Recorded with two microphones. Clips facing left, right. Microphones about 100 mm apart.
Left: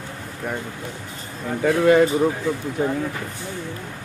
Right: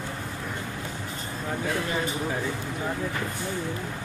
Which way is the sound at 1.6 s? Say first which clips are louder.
Left 15 dB; 90° left.